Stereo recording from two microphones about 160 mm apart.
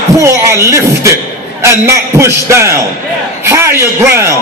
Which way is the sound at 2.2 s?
15° right (ahead or behind).